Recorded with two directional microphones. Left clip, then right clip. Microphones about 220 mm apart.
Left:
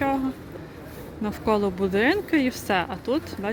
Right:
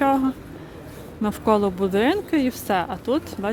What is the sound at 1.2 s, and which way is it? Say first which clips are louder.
Speech: right 4 dB; 15° right (ahead or behind).